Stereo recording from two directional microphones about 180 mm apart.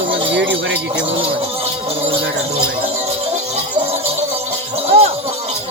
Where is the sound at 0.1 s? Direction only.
80° right.